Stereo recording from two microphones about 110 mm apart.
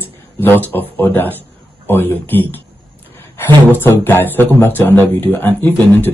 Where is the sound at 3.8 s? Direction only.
20° left (ahead or behind).